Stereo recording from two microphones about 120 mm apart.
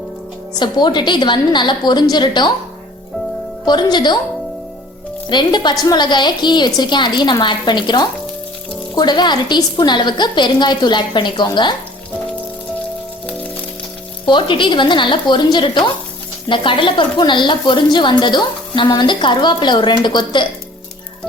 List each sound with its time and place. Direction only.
0.6 s a woman's voice: 40° left (ahead or behind)
3.7 s a woman's voice: 35° left (ahead or behind)
5.3 s a woman's voice: 40° left (ahead or behind)
14.3 s a woman's voice: 40° left (ahead or behind)